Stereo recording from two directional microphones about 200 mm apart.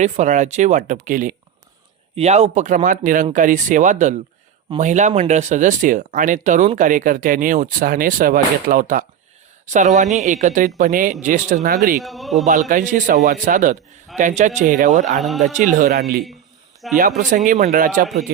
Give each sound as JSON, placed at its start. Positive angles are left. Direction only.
{"t": 0.0, "sound": "speech", "side_deg": -35}
{"t": 11.9, "sound": "speech", "side_deg": 0}
{"t": 12.5, "sound": "a man's voice", "side_deg": -40}